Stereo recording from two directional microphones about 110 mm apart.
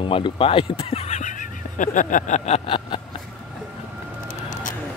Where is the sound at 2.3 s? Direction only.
85° left; by 3.0 s 55° left (ahead or behind).